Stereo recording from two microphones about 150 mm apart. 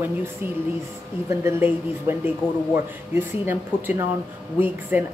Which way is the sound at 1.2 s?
15° right (ahead or behind).